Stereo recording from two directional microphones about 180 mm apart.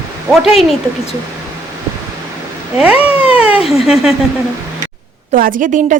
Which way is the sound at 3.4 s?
5° right (ahead or behind).